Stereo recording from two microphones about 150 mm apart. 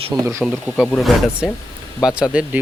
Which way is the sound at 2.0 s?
5° right (ahead or behind).